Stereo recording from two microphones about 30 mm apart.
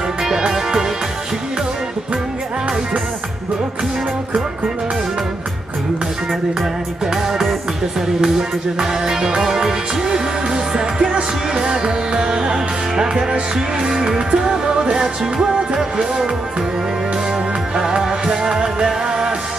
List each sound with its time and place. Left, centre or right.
0.2 s music: centre
9.0 s music: right
17.7 s music: right